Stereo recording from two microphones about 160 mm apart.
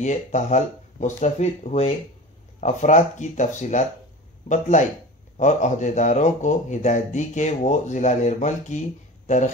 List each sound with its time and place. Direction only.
0.0 s speech: 50° left (ahead or behind)